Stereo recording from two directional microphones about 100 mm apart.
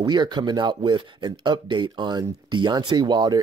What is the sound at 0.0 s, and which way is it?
Speech, 50° right (ahead or behind).